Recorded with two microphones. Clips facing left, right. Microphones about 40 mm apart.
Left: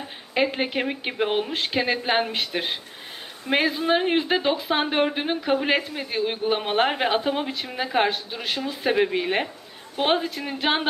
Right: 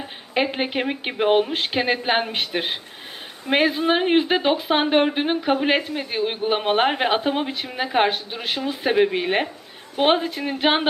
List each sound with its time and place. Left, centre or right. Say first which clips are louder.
0.3 s speech: right 1 dB; centre